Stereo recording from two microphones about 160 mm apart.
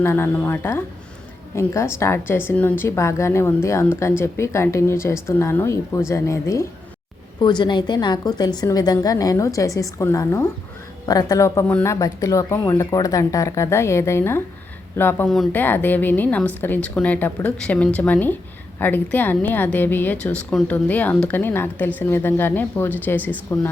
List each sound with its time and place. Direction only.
0.0 s speech: 15° left (ahead or behind)
7.3 s a woman's voice: 30° left (ahead or behind); by 23.6 s 10° left (ahead or behind)